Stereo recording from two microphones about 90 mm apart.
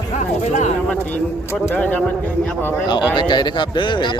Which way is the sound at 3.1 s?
55° left (ahead or behind).